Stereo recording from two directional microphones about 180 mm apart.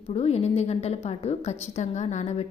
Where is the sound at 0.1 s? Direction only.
35° left (ahead or behind).